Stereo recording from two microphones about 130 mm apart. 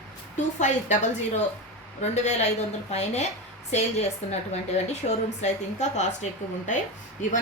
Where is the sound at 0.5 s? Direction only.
70° left (ahead or behind).